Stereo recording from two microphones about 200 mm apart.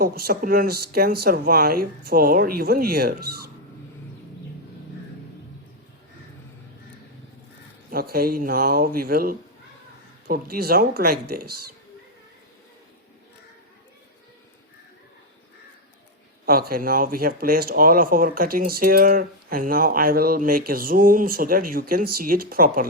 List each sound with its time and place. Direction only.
0.0 s speech: 50° right (ahead or behind)
7.9 s speech: 50° right (ahead or behind)
16.5 s speech: 50° right (ahead or behind)